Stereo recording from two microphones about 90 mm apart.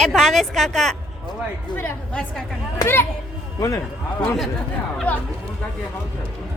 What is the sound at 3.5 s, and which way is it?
Speech, 35° left (ahead or behind).